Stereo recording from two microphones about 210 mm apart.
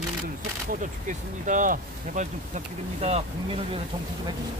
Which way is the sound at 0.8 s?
35° right (ahead or behind).